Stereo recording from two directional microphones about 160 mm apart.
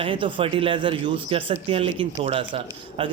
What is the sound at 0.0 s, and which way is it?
Speech, 30° right (ahead or behind).